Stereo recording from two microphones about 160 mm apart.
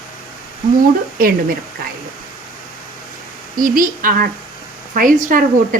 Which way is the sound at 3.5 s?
60° right (ahead or behind).